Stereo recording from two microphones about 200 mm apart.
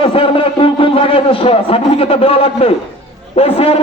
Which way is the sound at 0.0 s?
30° left (ahead or behind).